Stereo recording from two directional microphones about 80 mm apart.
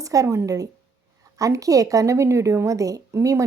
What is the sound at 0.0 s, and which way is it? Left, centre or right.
A woman's voice, right.